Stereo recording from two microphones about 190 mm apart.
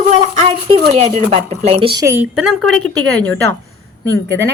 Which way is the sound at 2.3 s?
Centre (ahead or behind).